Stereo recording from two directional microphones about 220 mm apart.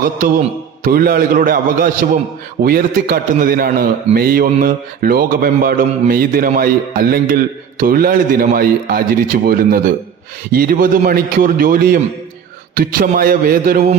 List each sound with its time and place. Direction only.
0.9 s a man's voice: 40° right (ahead or behind)